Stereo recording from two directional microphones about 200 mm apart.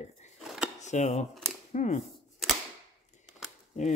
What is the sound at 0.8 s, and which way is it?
A woman's voice, 35° left (ahead or behind).